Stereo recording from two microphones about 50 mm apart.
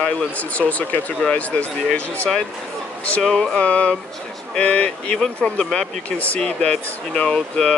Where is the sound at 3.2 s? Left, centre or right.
Centre.